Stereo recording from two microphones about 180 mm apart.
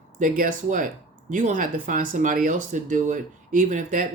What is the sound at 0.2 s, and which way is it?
Speech, 50° right (ahead or behind).